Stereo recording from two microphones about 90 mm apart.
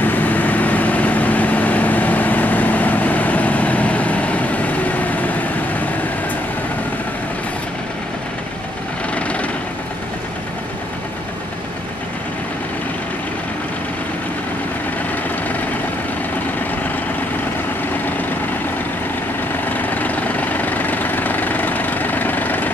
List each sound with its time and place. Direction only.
0.0 s vehicle: 20° left (ahead or behind)
9.1 s vehicle: 15° left (ahead or behind)
19.7 s vehicle: 20° left (ahead or behind)